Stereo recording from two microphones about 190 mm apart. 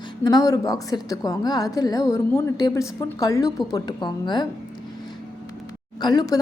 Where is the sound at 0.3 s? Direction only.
20° left (ahead or behind).